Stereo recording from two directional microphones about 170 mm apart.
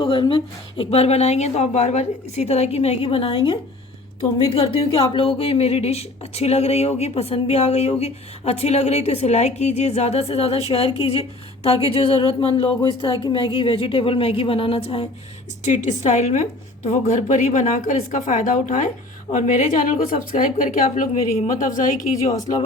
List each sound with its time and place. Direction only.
0.0 s a woman's voice: 30° left (ahead or behind); by 22.4 s 50° left (ahead or behind)